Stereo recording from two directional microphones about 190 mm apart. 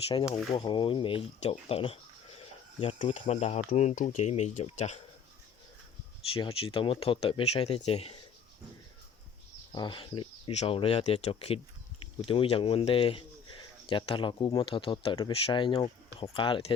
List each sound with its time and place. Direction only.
0.3 s speech: centre (ahead or behind)
0.5 s speech: 25° left (ahead or behind)
6.3 s speech: 30° left (ahead or behind)
9.7 s speech: 25° left (ahead or behind)